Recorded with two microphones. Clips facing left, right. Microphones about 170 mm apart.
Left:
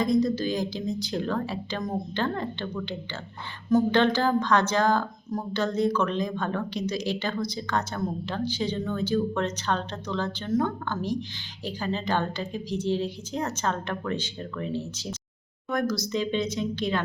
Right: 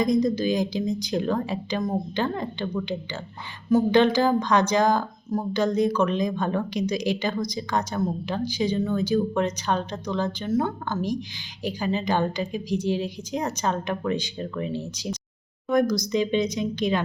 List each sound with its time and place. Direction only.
0.0 s a woman's voice: 15° right (ahead or behind)